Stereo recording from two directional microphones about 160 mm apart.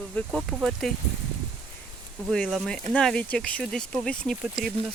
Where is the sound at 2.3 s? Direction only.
Centre (ahead or behind).